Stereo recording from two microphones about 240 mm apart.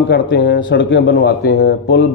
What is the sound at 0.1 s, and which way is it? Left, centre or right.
A man's voice, left.